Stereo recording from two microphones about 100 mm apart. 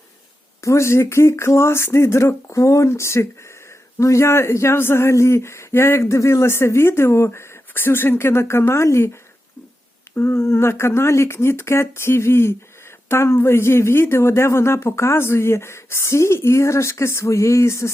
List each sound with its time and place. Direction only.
0.6 s speech: 30° left (ahead or behind)
10.2 s speech: 25° left (ahead or behind)